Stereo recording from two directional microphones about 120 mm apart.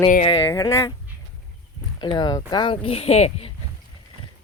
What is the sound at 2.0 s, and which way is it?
Speech, 40° left (ahead or behind).